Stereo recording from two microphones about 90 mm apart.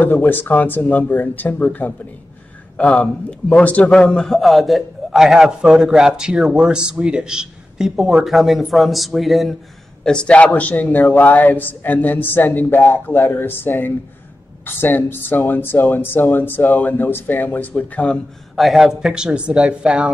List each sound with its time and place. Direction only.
0.0 s a man's voice: 20° left (ahead or behind)
3.9 s a man's voice: 5° left (ahead or behind)
10.0 s a man's voice: 10° left (ahead or behind)
18.6 s speech: centre (ahead or behind)